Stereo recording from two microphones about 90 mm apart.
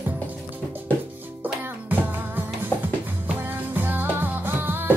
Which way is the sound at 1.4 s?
20° right (ahead or behind).